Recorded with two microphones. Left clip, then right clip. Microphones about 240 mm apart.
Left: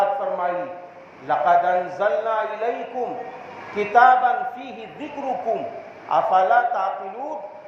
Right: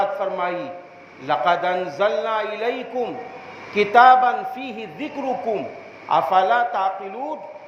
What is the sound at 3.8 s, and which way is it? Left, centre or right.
A man's voice, right.